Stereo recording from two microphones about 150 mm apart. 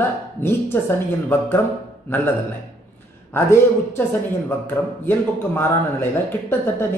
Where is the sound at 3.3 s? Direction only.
15° left (ahead or behind).